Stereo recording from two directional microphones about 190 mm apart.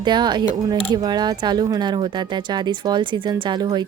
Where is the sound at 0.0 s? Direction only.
25° right (ahead or behind).